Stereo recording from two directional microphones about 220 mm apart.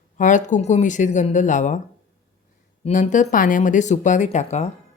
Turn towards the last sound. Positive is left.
turn(degrees=30)  # may be behind; listen again after turning